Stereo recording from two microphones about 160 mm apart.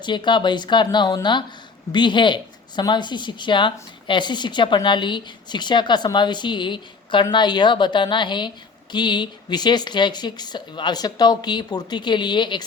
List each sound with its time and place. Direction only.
0.0 s speech: 30° left (ahead or behind)